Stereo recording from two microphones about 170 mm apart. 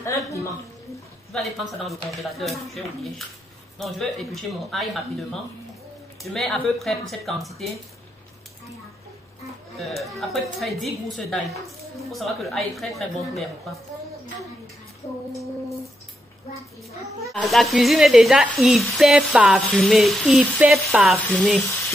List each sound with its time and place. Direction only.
1.3 s speech: centre (ahead or behind)
6.3 s speech: centre (ahead or behind)
10.1 s speech: centre (ahead or behind)
17.3 s speech: centre (ahead or behind)